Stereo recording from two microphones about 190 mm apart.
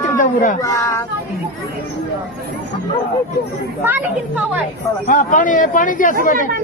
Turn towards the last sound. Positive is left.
turn(degrees=45)  # may be behind; listen again after turning